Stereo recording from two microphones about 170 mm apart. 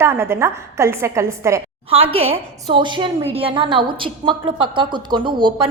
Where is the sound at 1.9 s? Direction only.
35° right (ahead or behind).